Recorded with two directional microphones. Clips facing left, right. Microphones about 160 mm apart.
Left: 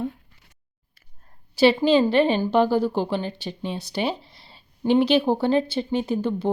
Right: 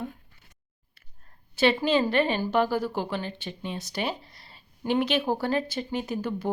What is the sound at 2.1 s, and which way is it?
A woman's voice, 30° left (ahead or behind).